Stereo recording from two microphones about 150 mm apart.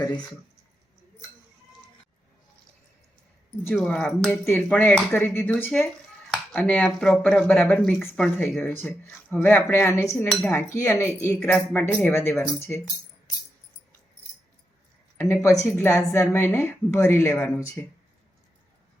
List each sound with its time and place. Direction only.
3.8 s a woman's voice: 5° left (ahead or behind)
15.2 s a woman's voice: 15° left (ahead or behind)